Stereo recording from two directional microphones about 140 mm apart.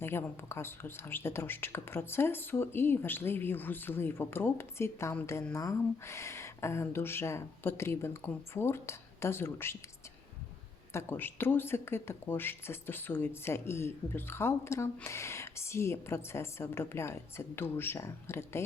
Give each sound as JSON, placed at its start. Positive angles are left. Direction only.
{"t": 0.0, "sound": "speech", "side_deg": 15}
{"t": 10.9, "sound": "speech", "side_deg": 15}